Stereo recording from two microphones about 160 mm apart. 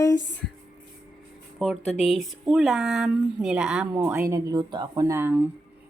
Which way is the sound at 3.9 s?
15° right (ahead or behind).